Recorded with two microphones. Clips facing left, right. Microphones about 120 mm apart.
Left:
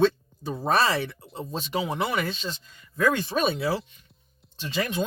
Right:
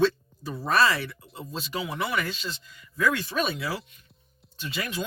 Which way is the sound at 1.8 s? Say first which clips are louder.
Left 3 dB; 30° left (ahead or behind).